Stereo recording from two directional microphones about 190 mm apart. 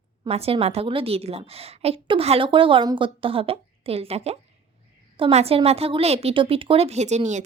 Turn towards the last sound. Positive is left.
turn(degrees=-40)  # may be behind; listen again after turning